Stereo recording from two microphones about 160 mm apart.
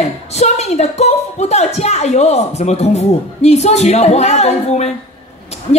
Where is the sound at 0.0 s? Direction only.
45° left (ahead or behind).